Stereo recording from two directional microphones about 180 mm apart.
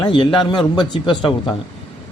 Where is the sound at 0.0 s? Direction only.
25° left (ahead or behind).